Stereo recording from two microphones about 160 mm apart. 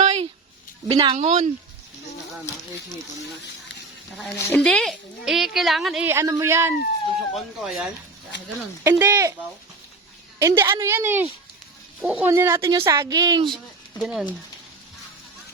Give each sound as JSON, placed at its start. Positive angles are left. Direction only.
{"t": 0.0, "sound": "music", "side_deg": -40}
{"t": 0.9, "sound": "speech", "side_deg": -35}
{"t": 1.2, "sound": "speech", "side_deg": -45}
{"t": 4.4, "sound": "a woman's voice", "side_deg": 10}
{"t": 6.1, "sound": "a woman's voice", "side_deg": -20}
{"t": 7.3, "sound": "a woman's voice", "side_deg": 0}
{"t": 8.8, "sound": "a woman's voice", "side_deg": -15}
{"t": 10.4, "sound": "a woman's voice", "side_deg": -15}
{"t": 12.7, "sound": "a woman's voice", "side_deg": -25}
{"t": 14.0, "sound": "a woman's voice", "side_deg": -5}